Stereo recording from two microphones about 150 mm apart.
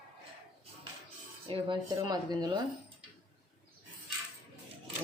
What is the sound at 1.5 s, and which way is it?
Speech, 35° right (ahead or behind).